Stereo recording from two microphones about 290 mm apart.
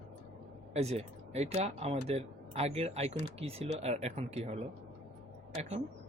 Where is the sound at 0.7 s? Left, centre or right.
Right.